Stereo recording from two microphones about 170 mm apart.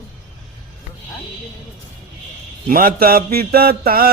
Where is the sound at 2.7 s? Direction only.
55° right (ahead or behind).